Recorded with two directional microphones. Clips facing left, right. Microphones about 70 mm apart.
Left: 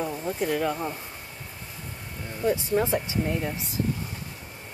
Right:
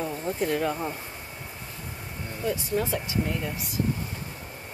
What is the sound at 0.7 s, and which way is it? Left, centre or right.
Speech, centre.